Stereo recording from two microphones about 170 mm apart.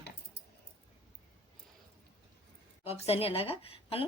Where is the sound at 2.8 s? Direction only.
40° left (ahead or behind).